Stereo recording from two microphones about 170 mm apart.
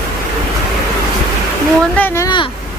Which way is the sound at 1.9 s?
15° left (ahead or behind).